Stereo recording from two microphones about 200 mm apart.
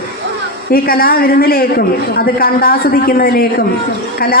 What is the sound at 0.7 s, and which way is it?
A woman's voice, 50° left (ahead or behind).